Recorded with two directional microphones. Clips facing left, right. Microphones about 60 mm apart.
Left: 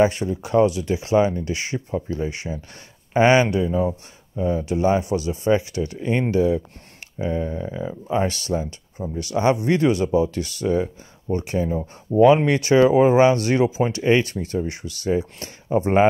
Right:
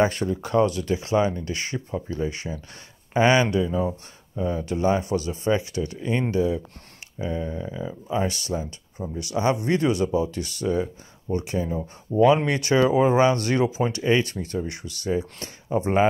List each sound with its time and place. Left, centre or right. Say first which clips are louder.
0.1 s speech: left 2 dB; centre
8.1 s speech: left 3 dB; left
9.0 s speech: left 3 dB; centre
9.3 s speech: left 3 dB; left